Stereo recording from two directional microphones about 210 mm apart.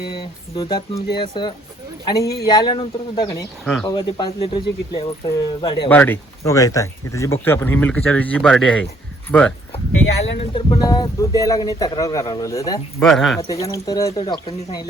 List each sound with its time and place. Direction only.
0.1 s speech: 20° left (ahead or behind)
5.9 s speech: 10° left (ahead or behind)
10.3 s speech: 25° left (ahead or behind)
13.0 s speech: centre (ahead or behind)
13.5 s speech: 15° left (ahead or behind)